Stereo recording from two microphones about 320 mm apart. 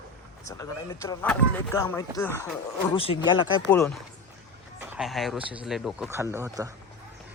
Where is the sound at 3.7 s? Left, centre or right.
Centre.